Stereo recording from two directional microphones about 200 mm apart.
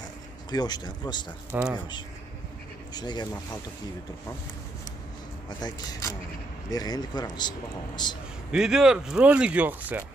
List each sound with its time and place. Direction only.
0.5 s speech: 20° left (ahead or behind)
1.5 s speech: 5° right (ahead or behind)
2.9 s speech: 20° left (ahead or behind)
5.6 s speech: 20° left (ahead or behind)
8.5 s speech: 5° right (ahead or behind)